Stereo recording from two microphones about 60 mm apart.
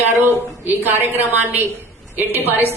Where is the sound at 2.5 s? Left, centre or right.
Right.